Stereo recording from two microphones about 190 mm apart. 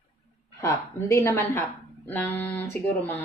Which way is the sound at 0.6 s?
15° left (ahead or behind).